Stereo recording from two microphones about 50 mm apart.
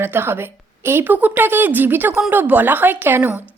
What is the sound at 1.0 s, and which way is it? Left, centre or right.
A woman's voice, right.